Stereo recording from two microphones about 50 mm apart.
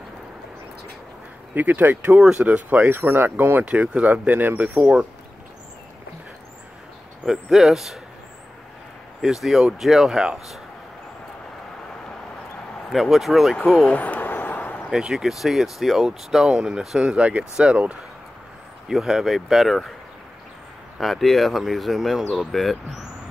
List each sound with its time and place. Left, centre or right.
1.5 s speech: right
4.3 s speech: right
4.6 s speech: right
7.4 s speech: centre
9.2 s speech: centre
12.9 s speech: centre
13.7 s speech: left
14.2 s a sound: left
14.9 s speech: centre
18.9 s speech: centre
21.0 s speech: centre